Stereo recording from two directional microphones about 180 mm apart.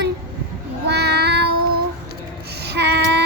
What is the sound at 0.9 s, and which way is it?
Cat, 65° right (ahead or behind).